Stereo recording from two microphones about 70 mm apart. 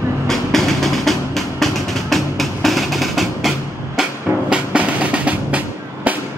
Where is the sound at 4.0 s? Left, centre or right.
Centre.